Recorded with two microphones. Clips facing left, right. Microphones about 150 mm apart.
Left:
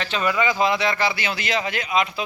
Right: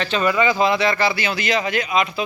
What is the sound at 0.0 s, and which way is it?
Speech, 15° left (ahead or behind).